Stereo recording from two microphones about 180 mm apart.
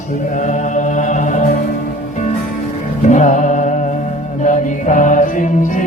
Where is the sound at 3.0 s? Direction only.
45° left (ahead or behind).